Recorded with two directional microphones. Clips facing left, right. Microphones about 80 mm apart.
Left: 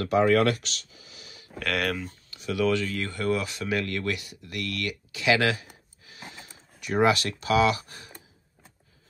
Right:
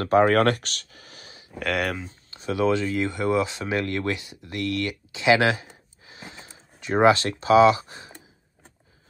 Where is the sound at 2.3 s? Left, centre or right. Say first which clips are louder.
Right 3 dB; right.